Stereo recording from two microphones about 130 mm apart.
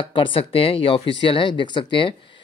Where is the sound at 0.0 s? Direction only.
40° left (ahead or behind).